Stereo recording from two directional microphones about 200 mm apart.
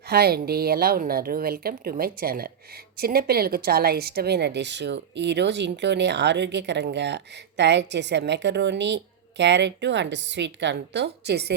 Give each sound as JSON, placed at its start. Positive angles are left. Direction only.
{"t": 0.1, "sound": "a woman's voice", "side_deg": -50}